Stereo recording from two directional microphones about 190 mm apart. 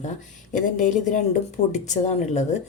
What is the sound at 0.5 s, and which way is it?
Speech, 40° left (ahead or behind).